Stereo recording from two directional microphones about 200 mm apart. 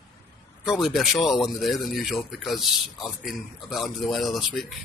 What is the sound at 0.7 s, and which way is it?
Speech, centre (ahead or behind).